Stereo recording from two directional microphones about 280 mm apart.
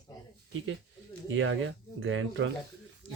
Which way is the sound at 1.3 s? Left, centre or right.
Right.